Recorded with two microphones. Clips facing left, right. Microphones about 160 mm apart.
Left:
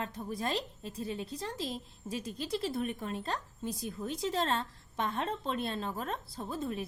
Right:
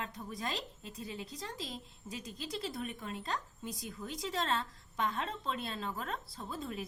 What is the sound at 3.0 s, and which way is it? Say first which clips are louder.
Speech: left 5 dB; 35° left (ahead or behind).